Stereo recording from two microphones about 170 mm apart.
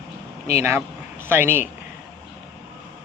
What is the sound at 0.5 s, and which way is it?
Speech, 15° right (ahead or behind).